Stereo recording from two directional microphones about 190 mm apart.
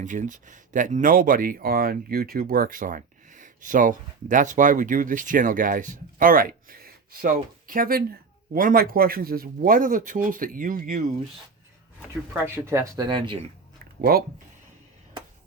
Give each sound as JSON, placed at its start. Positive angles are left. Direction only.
{"t": 0.0, "sound": "speech", "side_deg": -40}
{"t": 12.3, "sound": "speech", "side_deg": -10}
{"t": 14.0, "sound": "speech", "side_deg": -50}